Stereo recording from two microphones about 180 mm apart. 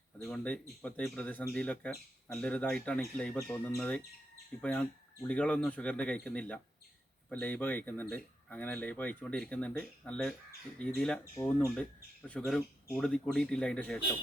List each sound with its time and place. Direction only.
0.2 s speech: 5° left (ahead or behind)